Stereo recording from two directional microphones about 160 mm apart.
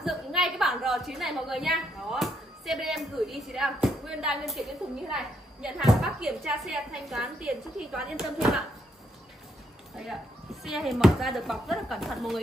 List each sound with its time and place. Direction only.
0.0 s a woman's voice: centre (ahead or behind)
10.6 s speech: centre (ahead or behind)